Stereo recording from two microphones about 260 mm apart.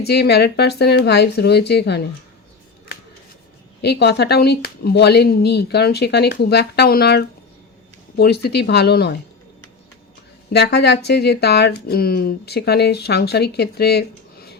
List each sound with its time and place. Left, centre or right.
0.0 s speech: left
3.8 s speech: left
10.5 s speech: left